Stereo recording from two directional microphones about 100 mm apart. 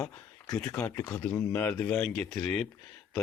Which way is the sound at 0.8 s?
35° left (ahead or behind).